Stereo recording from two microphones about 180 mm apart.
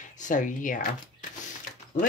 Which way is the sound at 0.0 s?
45° left (ahead or behind).